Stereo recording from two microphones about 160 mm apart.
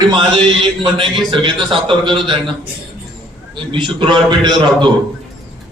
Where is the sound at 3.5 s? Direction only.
30° right (ahead or behind).